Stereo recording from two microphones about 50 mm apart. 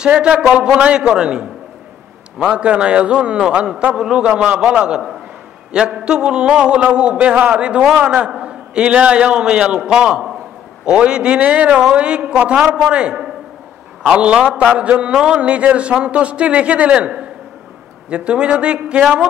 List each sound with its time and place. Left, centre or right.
0.0 s a man's voice: right